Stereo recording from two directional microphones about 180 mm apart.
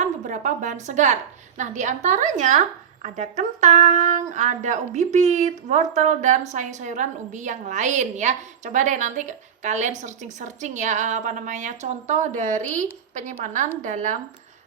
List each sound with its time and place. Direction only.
0.0 s a woman's voice: 45° right (ahead or behind)